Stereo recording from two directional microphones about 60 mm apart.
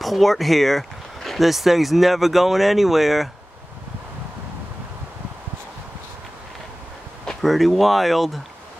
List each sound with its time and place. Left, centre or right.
0.0 s speech: centre
7.2 s speech: centre